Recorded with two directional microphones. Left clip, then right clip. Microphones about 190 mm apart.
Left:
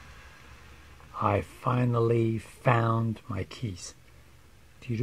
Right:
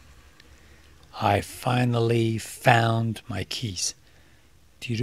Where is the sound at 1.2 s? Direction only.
45° right (ahead or behind).